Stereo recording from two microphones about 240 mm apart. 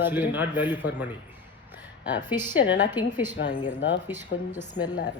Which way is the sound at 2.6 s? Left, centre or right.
Left.